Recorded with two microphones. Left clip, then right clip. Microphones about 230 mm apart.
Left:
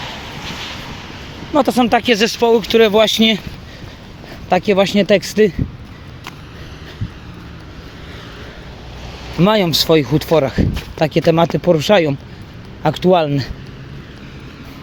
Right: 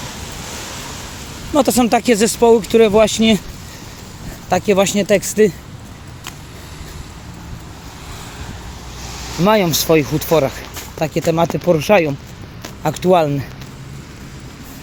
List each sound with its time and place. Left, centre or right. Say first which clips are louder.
1.5 s speech: left 1 dB; centre
4.4 s speech: left 1 dB; centre
9.1 s vehicle: right 2 dB; right
9.4 s speech: even; left